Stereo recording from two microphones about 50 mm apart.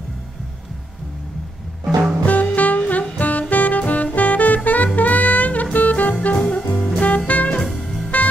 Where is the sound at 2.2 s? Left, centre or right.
Left.